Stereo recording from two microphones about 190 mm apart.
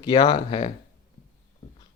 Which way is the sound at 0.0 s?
25° left (ahead or behind).